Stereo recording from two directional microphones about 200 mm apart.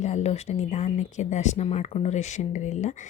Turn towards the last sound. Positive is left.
turn(degrees=35)  # may be behind; listen again after turning